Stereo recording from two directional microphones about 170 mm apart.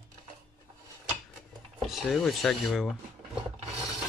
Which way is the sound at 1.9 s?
Centre (ahead or behind).